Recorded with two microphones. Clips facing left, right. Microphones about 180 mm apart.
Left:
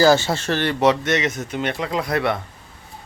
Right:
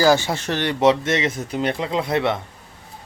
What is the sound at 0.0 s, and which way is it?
Speech, 15° right (ahead or behind).